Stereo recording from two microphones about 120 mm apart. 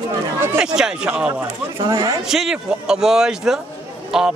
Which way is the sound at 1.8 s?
45° right (ahead or behind).